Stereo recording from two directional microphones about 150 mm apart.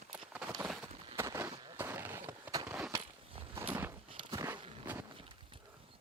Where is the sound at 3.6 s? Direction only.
15° right (ahead or behind).